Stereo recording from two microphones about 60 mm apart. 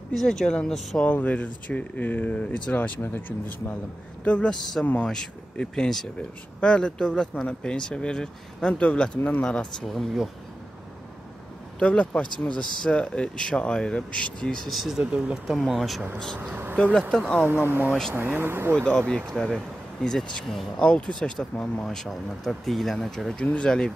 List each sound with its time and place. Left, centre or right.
0.1 s speech: centre
0.9 s speech: left
2.4 s speech: centre
2.7 s speech: left
4.2 s speech: centre
9.9 s speech: centre
11.8 s speech: centre
14.7 s speech: centre
15.0 s speech: right
15.5 s speech: centre
17.1 s speech: centre
17.5 s speech: right
18.8 s speech: centre